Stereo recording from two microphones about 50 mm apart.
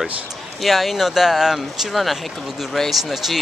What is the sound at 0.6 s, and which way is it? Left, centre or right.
Speech, centre.